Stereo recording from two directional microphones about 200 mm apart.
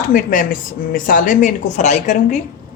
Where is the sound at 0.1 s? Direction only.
45° left (ahead or behind).